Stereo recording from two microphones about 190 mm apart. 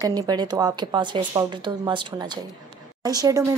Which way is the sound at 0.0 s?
20° right (ahead or behind).